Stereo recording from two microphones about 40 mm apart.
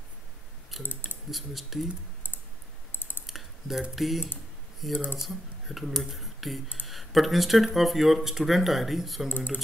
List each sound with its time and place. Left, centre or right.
0.7 s clicking: centre
1.3 s speech: centre
2.9 s typing: left
3.3 s typing: centre
3.9 s speech: centre